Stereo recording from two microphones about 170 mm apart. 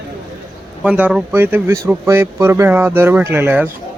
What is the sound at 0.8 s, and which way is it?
Speech, 5° right (ahead or behind).